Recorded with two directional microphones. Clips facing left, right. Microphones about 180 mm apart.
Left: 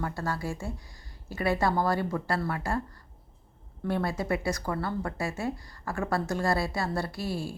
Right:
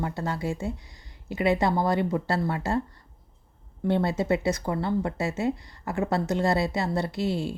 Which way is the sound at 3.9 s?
25° right (ahead or behind).